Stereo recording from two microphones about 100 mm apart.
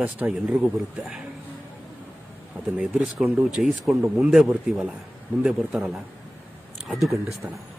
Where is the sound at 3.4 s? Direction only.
Centre (ahead or behind).